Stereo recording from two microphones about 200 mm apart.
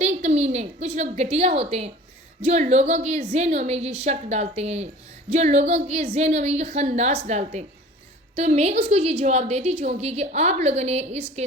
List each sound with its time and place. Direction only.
0.0 s a woman's voice: 35° right (ahead or behind)